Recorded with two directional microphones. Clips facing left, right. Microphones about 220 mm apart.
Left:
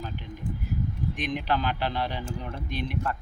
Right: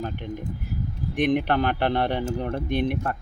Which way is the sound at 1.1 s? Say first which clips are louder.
Right 9 dB; 55° right (ahead or behind).